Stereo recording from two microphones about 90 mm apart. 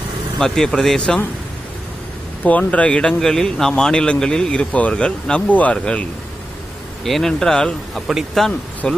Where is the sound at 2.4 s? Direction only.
15° left (ahead or behind).